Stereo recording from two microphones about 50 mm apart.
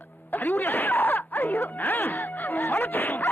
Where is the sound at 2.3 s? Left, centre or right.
Left.